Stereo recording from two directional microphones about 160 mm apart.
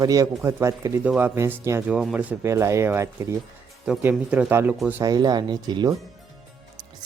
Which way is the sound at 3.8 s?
5° right (ahead or behind).